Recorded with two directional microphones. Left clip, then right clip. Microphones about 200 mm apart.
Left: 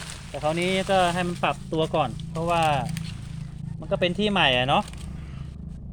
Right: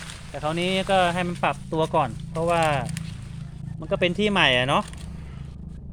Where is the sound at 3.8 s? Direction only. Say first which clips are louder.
Right 1 dB; 20° right (ahead or behind).